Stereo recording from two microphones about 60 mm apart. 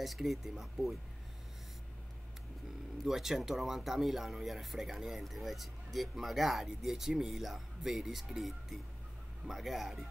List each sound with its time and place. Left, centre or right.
0.0 s speech: centre
3.0 s speech: centre